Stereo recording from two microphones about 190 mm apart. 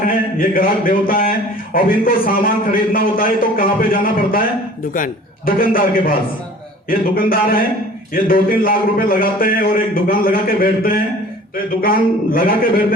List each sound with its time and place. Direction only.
0.1 s a man's voice: 50° left (ahead or behind)